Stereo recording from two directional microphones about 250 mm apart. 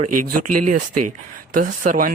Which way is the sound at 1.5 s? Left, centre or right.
Right.